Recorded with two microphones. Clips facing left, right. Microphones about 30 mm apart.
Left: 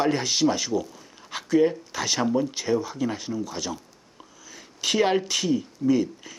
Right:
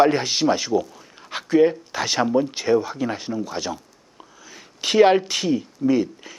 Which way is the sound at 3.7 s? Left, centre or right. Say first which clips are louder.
Right 1 dB; centre.